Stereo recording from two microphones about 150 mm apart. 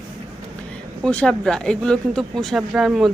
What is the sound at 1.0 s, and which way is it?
A woman's voice, 5° left (ahead or behind).